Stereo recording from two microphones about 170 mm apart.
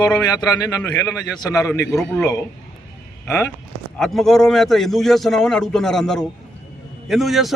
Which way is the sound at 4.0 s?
Centre (ahead or behind).